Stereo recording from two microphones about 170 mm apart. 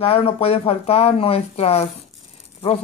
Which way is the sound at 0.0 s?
35° left (ahead or behind).